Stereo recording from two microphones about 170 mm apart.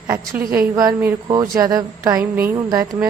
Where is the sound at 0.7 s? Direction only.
20° right (ahead or behind).